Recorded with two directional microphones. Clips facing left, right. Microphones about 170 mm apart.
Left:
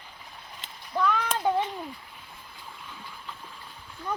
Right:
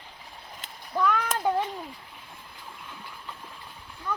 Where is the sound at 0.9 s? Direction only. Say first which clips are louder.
Right 1 dB; 5° right (ahead or behind).